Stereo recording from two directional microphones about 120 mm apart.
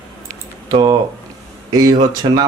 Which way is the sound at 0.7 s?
35° right (ahead or behind).